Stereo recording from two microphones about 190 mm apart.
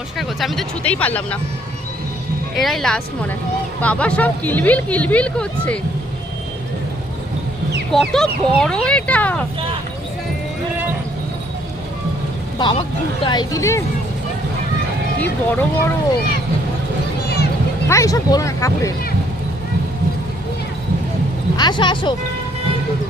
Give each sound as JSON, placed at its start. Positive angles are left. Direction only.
{"t": 0.2, "sound": "speech", "side_deg": 0}
{"t": 2.6, "sound": "speech", "side_deg": 0}
{"t": 7.9, "sound": "speech", "side_deg": 0}
{"t": 12.5, "sound": "speech", "side_deg": 25}
{"t": 15.2, "sound": "speech", "side_deg": 10}
{"t": 17.2, "sound": "a sound", "side_deg": 55}
{"t": 17.8, "sound": "speech", "side_deg": 15}
{"t": 21.5, "sound": "speech", "side_deg": 20}